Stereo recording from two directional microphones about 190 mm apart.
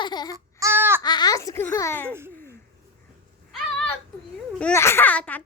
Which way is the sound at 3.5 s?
5° left (ahead or behind).